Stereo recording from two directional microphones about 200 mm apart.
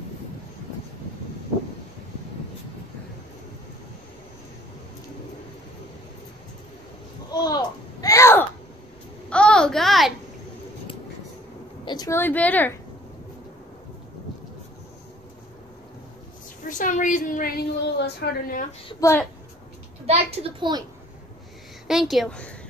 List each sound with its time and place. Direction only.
7.2 s a sound: 20° left (ahead or behind); by 10.1 s centre (ahead or behind)
11.8 s a woman's voice: 20° left (ahead or behind)
16.6 s a sound: 40° left (ahead or behind)
18.9 s a woman's voice: 15° left (ahead or behind)
20.1 s a child's voice: 30° right (ahead or behind)
21.8 s a woman's voice: centre (ahead or behind)